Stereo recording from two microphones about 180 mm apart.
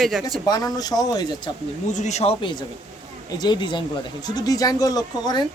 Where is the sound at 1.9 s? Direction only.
40° left (ahead or behind).